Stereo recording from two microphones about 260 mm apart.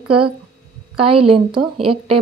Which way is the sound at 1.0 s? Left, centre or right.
Right.